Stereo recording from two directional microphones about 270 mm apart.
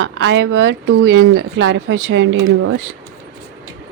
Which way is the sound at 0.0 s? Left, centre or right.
Right.